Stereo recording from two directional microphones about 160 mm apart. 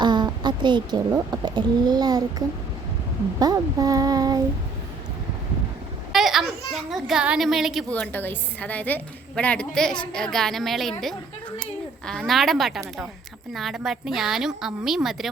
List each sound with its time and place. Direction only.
0.0 s a sound: 25° right (ahead or behind)
1.1 s speech: 25° right (ahead or behind)
3.4 s speech: 20° right (ahead or behind)
6.1 s children playing: centre (ahead or behind)
6.9 s a woman's voice: 5° right (ahead or behind)
7.9 s a woman's voice: 10° left (ahead or behind)